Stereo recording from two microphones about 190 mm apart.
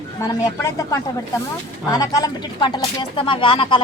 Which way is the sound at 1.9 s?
20° left (ahead or behind).